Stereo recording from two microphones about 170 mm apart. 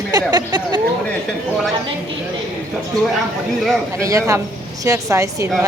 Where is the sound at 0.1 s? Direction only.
25° right (ahead or behind).